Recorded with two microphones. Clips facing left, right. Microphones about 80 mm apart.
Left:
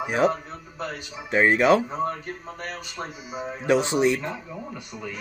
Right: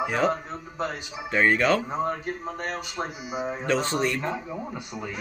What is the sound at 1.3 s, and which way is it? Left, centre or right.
Speech, centre.